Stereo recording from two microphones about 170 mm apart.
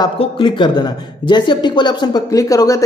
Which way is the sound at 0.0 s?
30° left (ahead or behind).